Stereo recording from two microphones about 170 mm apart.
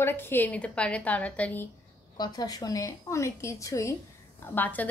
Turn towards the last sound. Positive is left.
turn(degrees=10)  # may be behind; listen again after turning